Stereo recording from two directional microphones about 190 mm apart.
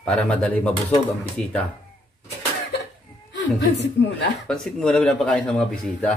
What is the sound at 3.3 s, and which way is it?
Speech, 65° left (ahead or behind).